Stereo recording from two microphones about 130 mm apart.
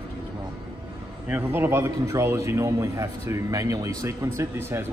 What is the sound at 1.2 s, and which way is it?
A man's voice, 15° right (ahead or behind).